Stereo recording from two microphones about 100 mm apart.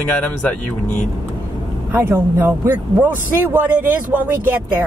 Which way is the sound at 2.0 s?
20° right (ahead or behind).